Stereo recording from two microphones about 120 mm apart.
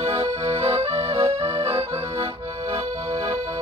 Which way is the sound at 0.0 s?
55° right (ahead or behind).